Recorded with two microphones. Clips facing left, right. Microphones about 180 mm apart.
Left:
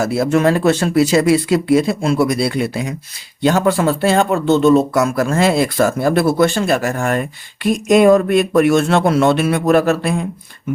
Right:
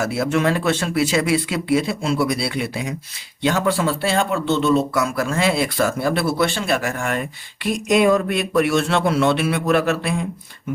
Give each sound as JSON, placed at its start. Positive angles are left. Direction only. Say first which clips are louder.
{"t": 0.0, "sound": "speech", "louder": "left 5 dB", "side_deg": 40}